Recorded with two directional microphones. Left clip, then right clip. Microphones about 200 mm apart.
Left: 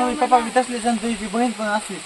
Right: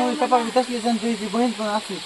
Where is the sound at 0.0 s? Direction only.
Centre (ahead or behind).